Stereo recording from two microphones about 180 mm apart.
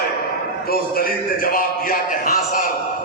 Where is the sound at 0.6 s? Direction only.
55° left (ahead or behind).